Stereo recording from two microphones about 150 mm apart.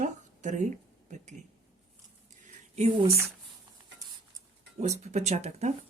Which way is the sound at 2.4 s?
50° right (ahead or behind).